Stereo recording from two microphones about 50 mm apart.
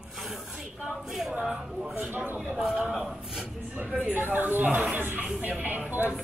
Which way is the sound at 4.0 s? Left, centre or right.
Right.